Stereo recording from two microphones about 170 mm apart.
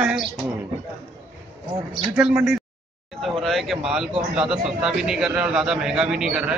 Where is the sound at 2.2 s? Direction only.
5° right (ahead or behind).